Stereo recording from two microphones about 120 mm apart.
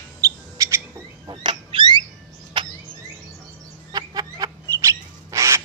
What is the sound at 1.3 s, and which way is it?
Rodents, 40° right (ahead or behind).